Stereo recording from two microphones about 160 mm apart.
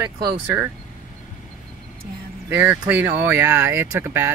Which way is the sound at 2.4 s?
10° right (ahead or behind).